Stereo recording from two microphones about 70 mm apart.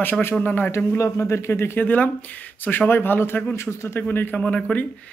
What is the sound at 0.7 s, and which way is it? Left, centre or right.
Speech, left.